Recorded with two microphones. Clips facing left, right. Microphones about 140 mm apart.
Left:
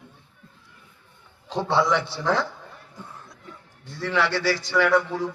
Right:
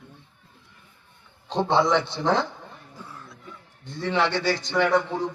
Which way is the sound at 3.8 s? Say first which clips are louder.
Right 1 dB; 20° right (ahead or behind).